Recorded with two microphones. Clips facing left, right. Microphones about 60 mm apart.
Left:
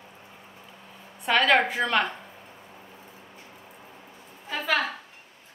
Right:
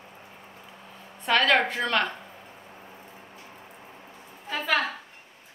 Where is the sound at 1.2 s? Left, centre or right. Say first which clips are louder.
Left 1 dB; centre.